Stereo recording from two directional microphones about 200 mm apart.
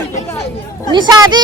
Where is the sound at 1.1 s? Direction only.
20° right (ahead or behind).